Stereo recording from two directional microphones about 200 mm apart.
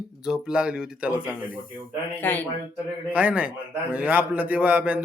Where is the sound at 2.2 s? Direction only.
10° left (ahead or behind).